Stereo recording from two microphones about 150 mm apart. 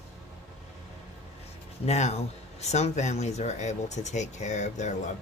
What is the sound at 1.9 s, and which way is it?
Speech, 45° left (ahead or behind).